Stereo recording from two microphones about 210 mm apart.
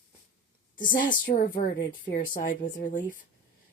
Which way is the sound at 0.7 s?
40° left (ahead or behind).